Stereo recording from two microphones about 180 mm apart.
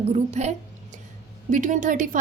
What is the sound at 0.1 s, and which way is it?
A woman's voice, 40° right (ahead or behind).